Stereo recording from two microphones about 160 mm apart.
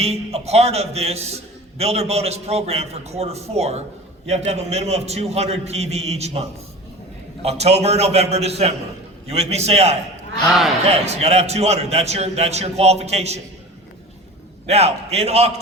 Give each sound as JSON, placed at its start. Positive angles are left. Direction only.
{"t": 0.0, "sound": "a man's voice", "side_deg": -40}
{"t": 10.5, "sound": "speech", "side_deg": 0}
{"t": 10.8, "sound": "a man's voice", "side_deg": -40}
{"t": 14.7, "sound": "a man's voice", "side_deg": -40}